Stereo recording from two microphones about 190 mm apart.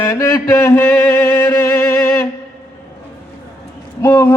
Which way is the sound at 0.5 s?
15° left (ahead or behind).